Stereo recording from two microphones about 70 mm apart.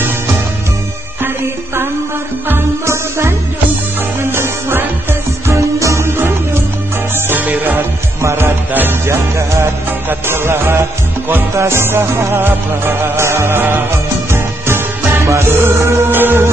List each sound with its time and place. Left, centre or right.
2.4 s music: right
8.2 s music: right
15.1 s music: right